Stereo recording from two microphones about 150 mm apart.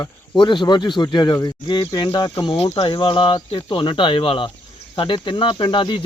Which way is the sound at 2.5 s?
45° left (ahead or behind).